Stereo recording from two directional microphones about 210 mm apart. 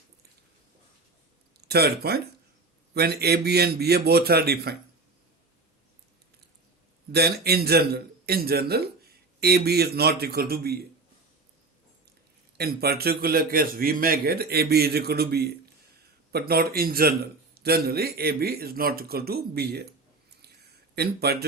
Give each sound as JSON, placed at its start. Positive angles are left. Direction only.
{"t": 1.6, "sound": "a man's voice", "side_deg": -50}
{"t": 7.1, "sound": "a man's voice", "side_deg": -50}
{"t": 12.5, "sound": "a man's voice", "side_deg": -50}
{"t": 20.9, "sound": "a man's voice", "side_deg": -50}